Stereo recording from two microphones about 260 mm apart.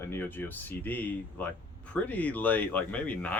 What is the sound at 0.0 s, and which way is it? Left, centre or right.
Speech, centre.